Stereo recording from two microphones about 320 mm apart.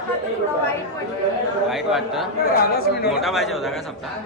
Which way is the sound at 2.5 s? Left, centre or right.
Left.